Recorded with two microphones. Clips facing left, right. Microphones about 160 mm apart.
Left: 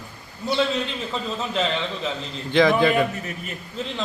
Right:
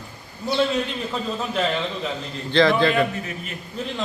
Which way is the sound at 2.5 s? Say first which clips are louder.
Even; 15° left (ahead or behind).